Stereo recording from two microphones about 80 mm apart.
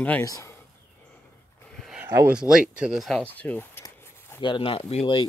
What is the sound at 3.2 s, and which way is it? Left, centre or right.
Speech, centre.